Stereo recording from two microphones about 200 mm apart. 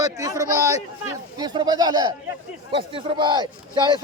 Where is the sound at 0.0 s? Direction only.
15° right (ahead or behind).